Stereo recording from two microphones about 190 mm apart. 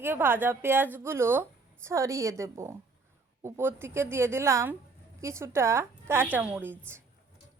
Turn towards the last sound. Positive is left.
turn(degrees=-10)  # may be behind; listen again after turning